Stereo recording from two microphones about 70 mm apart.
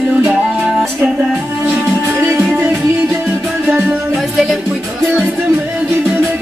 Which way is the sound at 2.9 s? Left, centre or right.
Right.